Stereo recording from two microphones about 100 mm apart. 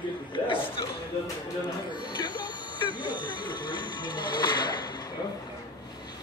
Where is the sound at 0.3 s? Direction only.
60° left (ahead or behind).